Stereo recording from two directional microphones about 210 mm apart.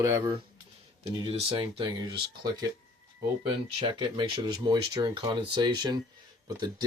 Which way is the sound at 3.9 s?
20° right (ahead or behind).